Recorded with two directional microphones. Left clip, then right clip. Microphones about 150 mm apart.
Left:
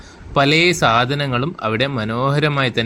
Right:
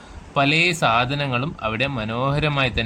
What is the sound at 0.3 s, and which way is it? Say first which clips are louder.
Speech: left 4 dB; 15° left (ahead or behind).